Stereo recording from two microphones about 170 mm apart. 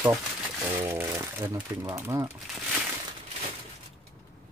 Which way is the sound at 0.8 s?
15° right (ahead or behind).